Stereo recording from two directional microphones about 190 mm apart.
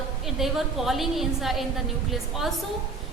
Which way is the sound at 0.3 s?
Centre (ahead or behind).